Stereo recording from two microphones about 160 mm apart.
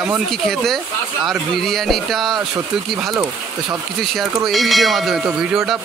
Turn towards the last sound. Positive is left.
turn(degrees=-5)  # may be behind; listen again after turning